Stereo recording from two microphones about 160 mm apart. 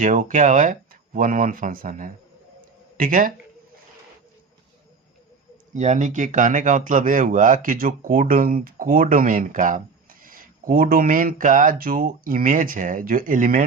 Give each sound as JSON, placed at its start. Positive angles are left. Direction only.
{"t": 0.0, "sound": "speech", "side_deg": -55}
{"t": 5.7, "sound": "speech", "side_deg": -50}